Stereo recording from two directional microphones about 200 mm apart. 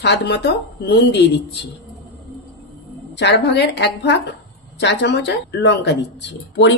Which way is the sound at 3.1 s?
60° left (ahead or behind).